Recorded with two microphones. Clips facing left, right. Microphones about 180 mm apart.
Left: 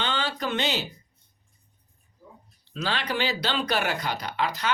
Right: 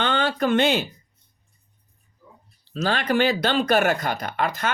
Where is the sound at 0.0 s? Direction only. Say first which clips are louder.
Right 7 dB; 55° right (ahead or behind).